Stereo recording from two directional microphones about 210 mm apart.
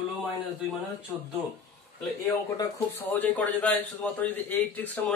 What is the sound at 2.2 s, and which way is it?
A man's voice, 15° left (ahead or behind).